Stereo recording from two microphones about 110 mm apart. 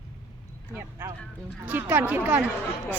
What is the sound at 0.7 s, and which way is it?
Speech, 20° right (ahead or behind).